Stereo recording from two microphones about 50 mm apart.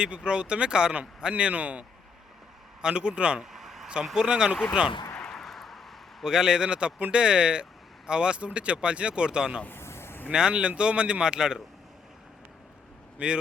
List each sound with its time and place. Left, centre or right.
0.3 s speech: centre
2.8 s speech: centre
3.4 s vehicle: centre
4.0 s speech: centre
5.2 s a sound: centre
6.2 s speech: centre
9.6 s a sound: left
10.2 s speech: centre
13.1 s a man's voice: centre